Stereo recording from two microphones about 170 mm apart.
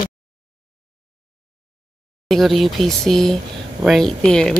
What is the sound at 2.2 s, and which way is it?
Speech, centre (ahead or behind).